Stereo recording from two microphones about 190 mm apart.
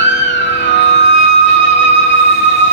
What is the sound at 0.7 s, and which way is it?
Music, 70° left (ahead or behind).